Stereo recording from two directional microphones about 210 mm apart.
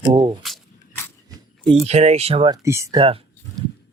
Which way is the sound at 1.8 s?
30° right (ahead or behind).